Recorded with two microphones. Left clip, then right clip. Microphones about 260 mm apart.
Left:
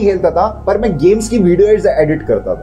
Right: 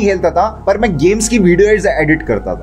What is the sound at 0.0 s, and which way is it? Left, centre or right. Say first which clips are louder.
Speech: even; right.